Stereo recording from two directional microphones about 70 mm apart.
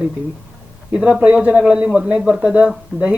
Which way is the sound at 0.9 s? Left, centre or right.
Centre.